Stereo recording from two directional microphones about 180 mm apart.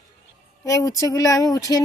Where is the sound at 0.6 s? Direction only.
20° left (ahead or behind).